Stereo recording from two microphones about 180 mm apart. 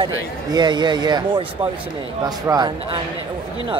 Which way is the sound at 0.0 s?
25° right (ahead or behind).